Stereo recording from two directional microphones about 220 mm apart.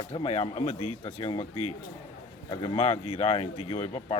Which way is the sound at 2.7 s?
25° left (ahead or behind).